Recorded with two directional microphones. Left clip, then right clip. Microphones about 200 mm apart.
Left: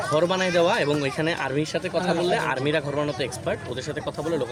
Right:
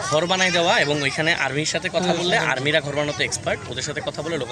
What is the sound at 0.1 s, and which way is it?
Speech, 10° left (ahead or behind).